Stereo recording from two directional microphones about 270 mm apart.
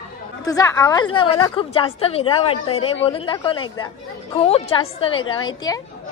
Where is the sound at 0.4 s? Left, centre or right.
Centre.